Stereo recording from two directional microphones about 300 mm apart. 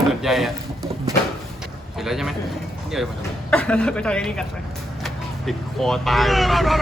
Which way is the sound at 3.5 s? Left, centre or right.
Centre.